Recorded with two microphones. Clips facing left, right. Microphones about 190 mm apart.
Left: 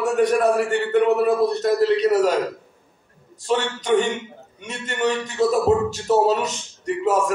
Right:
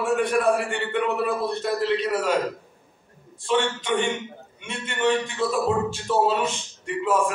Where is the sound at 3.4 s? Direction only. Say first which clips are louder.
Left 1 dB; 40° left (ahead or behind).